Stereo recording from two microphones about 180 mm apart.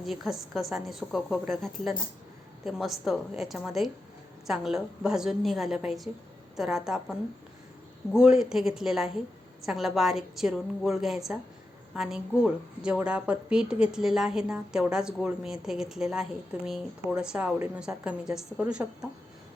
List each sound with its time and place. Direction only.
0.0 s a woman's voice: centre (ahead or behind)